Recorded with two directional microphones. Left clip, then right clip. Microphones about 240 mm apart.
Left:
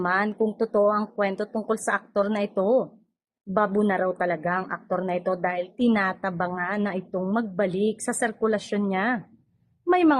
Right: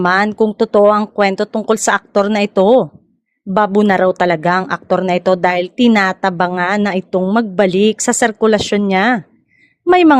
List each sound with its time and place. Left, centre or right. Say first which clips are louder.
0.0 s a woman's voice: right 11 dB; right